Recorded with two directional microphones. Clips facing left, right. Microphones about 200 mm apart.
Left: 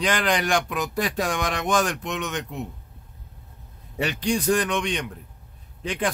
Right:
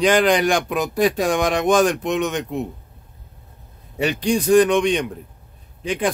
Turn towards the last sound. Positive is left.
turn(degrees=-10)  # may be behind; listen again after turning